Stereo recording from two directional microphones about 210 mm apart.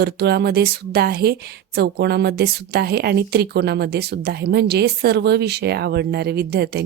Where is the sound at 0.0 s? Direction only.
50° right (ahead or behind).